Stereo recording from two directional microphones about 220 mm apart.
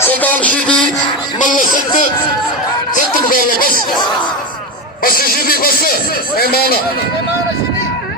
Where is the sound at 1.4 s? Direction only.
35° left (ahead or behind).